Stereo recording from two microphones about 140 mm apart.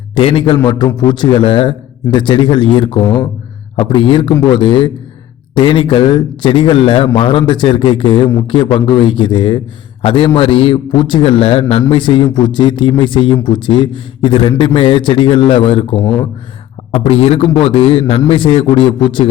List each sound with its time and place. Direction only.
0.2 s a man's voice: 35° left (ahead or behind)